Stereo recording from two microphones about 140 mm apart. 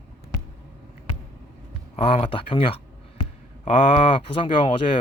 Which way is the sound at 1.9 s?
40° left (ahead or behind).